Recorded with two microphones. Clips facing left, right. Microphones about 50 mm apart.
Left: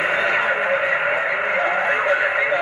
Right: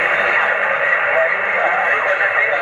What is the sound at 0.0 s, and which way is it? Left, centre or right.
Radio, right.